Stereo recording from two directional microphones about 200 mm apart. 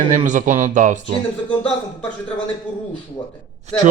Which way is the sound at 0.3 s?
40° right (ahead or behind).